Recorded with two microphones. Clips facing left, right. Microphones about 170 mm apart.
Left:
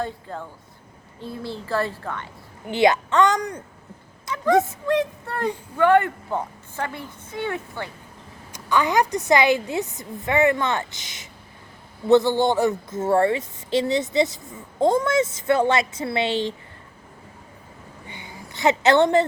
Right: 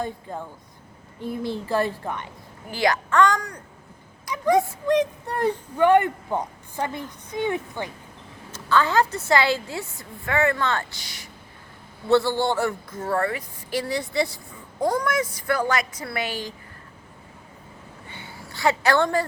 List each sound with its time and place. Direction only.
0.0 s a woman's voice: 15° right (ahead or behind)
2.6 s a woman's voice: 20° left (ahead or behind)
4.3 s a sound: 25° left (ahead or behind)
4.9 s a woman's voice: 15° right (ahead or behind)
8.5 s a woman's voice: 15° left (ahead or behind)
18.1 s a sound: 15° left (ahead or behind)